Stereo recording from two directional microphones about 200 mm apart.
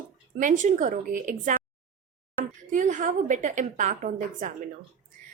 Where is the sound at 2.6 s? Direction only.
40° right (ahead or behind).